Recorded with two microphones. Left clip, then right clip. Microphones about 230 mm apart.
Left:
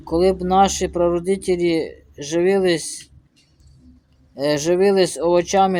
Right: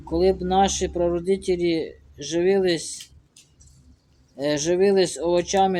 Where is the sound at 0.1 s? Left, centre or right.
Left.